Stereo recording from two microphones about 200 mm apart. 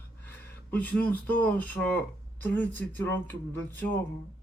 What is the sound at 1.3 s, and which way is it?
Speech, 10° left (ahead or behind).